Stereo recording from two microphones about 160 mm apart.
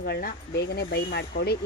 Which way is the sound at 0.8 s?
90° left.